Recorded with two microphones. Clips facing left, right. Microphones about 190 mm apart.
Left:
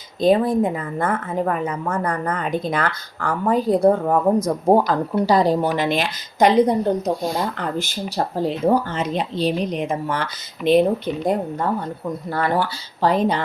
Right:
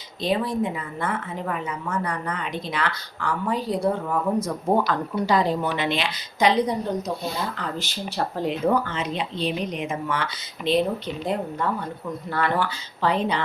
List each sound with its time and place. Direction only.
0.2 s a woman's voice: 50° left (ahead or behind)
8.4 s speech: 35° left (ahead or behind)